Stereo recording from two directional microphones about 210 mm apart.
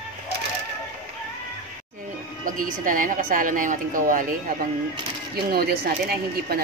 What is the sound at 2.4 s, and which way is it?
A woman's voice, 40° right (ahead or behind).